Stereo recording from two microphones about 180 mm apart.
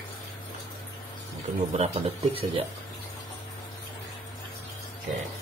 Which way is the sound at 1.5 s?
35° right (ahead or behind).